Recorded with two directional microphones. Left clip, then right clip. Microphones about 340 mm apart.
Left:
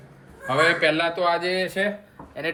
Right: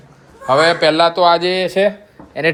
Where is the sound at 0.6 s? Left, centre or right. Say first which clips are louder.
Right 7 dB; right.